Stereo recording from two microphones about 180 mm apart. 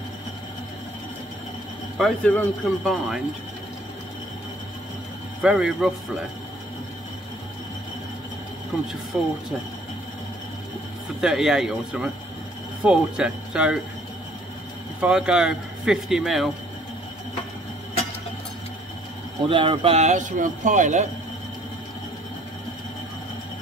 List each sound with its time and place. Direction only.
2.0 s speech: 5° left (ahead or behind)
5.4 s speech: 5° right (ahead or behind)
9.1 s speech: 5° right (ahead or behind)
11.1 s speech: 5° right (ahead or behind)
15.0 s speech: 5° right (ahead or behind)
19.4 s speech: 30° right (ahead or behind)